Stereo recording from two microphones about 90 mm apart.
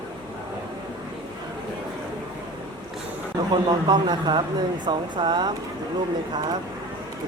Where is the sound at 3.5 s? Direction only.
55° right (ahead or behind).